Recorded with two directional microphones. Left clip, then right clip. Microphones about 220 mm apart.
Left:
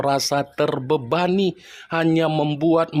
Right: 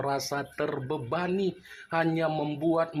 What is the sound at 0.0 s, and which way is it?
Speech, 50° left (ahead or behind).